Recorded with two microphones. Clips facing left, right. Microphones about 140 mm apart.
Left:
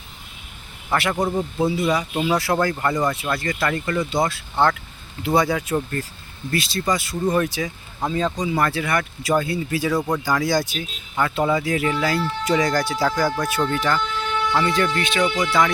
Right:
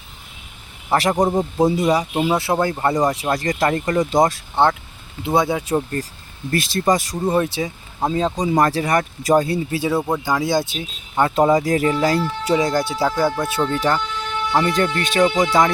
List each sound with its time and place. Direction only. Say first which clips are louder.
0.9 s speech: right 4 dB; 40° right (ahead or behind)
2.2 s speech: right 1 dB; 25° right (ahead or behind); by 4.4 s 40° right (ahead or behind)
4.5 s speech: right 2 dB; 25° right (ahead or behind)
6.5 s speech: right 4 dB; 45° right (ahead or behind); by 8.4 s 25° right (ahead or behind)
8.4 s speech: right 4 dB; 40° right (ahead or behind)
11.3 s speech: right 6 dB; 40° right (ahead or behind)